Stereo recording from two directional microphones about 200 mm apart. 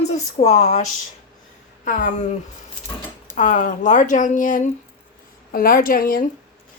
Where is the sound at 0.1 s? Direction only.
35° left (ahead or behind).